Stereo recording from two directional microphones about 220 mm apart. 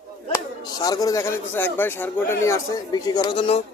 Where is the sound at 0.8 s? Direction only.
15° left (ahead or behind).